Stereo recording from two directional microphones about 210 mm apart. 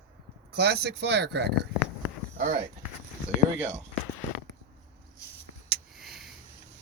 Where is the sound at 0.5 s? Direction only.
55° right (ahead or behind).